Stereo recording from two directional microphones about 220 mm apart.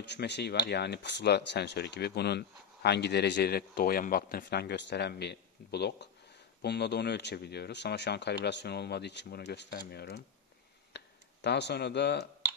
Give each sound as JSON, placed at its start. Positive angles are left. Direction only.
{"t": 0.0, "sound": "speech", "side_deg": 50}
{"t": 11.4, "sound": "speech", "side_deg": 50}